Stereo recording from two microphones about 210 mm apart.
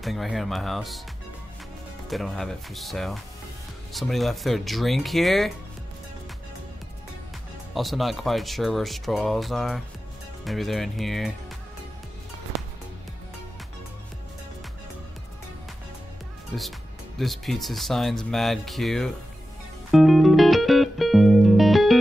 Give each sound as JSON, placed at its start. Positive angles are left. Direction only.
{"t": 0.0, "sound": "speech", "side_deg": 0}
{"t": 2.0, "sound": "speech", "side_deg": 0}
{"t": 7.7, "sound": "speech", "side_deg": 0}
{"t": 17.2, "sound": "speech", "side_deg": 0}
{"t": 19.9, "sound": "music", "side_deg": 0}